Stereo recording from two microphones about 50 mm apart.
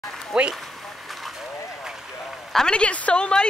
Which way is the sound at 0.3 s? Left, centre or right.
Centre.